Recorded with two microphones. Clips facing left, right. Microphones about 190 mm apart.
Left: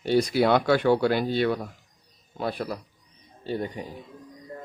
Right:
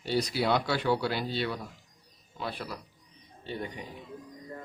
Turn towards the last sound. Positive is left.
turn(degrees=40)  # may be behind; listen again after turning